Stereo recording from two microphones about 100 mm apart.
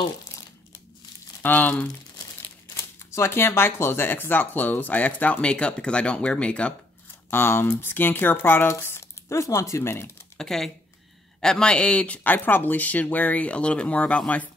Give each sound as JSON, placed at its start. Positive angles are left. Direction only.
{"t": 1.4, "sound": "speech", "side_deg": 15}
{"t": 2.7, "sound": "speech", "side_deg": 30}
{"t": 7.2, "sound": "speech", "side_deg": 25}
{"t": 10.3, "sound": "speech", "side_deg": 5}